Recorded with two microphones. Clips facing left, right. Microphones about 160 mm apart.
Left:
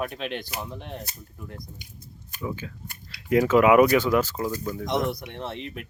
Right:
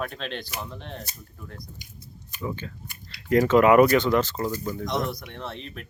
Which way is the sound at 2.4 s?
5° left (ahead or behind).